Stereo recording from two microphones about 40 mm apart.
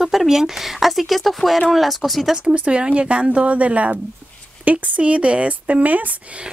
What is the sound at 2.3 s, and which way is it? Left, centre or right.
A woman's voice, right.